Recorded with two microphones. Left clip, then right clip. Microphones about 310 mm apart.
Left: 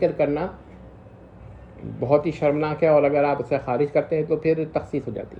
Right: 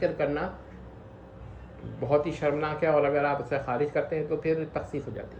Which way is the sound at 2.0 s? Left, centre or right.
Centre.